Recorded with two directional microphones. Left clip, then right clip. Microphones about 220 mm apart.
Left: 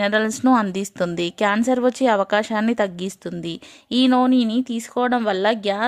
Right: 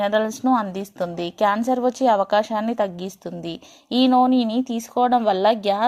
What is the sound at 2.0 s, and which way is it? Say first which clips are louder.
Speech: right 3 dB; 40° left (ahead or behind).